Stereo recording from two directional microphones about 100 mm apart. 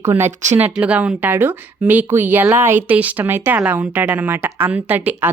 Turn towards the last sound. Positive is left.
turn(degrees=-15)  # may be behind; listen again after turning